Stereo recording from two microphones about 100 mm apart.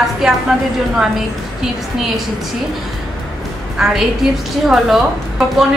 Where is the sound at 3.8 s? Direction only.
5° right (ahead or behind).